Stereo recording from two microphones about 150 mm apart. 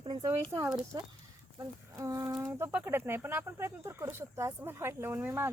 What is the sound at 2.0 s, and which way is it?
Speech, 20° right (ahead or behind).